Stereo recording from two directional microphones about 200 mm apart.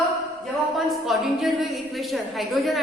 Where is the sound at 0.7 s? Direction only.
Centre (ahead or behind).